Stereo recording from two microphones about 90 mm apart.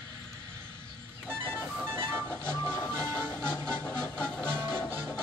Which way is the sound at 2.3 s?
15° left (ahead or behind).